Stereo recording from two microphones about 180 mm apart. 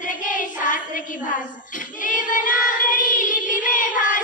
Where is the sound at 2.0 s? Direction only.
50° left (ahead or behind).